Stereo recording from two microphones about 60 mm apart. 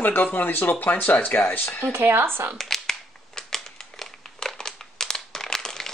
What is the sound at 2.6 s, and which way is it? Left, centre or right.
Crumpling, centre.